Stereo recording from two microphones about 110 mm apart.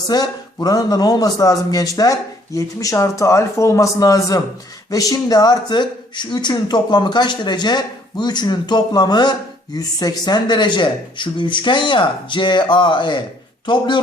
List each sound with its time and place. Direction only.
0.1 s a man's voice: 35° left (ahead or behind)